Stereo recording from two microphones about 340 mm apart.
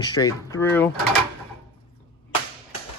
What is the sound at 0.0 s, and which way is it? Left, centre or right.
Speech, centre.